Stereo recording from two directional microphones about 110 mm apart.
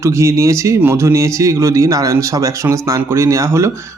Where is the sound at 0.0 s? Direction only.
25° right (ahead or behind).